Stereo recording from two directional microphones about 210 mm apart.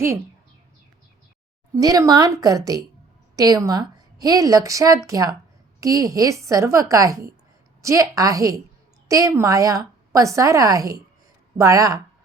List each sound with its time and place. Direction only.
1.7 s a woman's voice: 15° right (ahead or behind)